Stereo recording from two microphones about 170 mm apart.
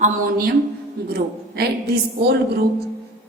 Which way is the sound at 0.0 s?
60° right (ahead or behind).